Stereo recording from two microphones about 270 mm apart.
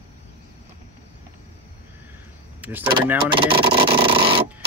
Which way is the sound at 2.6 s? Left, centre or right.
Centre.